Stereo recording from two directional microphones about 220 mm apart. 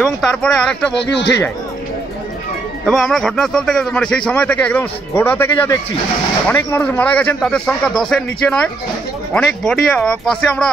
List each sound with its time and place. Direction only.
0.0 s a man's voice: 5° left (ahead or behind)
1.1 s speech: 55° left (ahead or behind)
2.9 s a man's voice: centre (ahead or behind)